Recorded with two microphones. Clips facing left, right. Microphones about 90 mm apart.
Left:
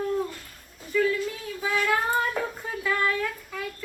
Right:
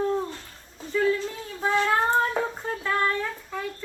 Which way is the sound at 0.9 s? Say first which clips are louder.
Right 1 dB; 30° right (ahead or behind).